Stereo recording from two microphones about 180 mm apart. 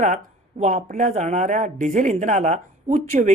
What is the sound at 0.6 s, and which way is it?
Speech, 45° right (ahead or behind).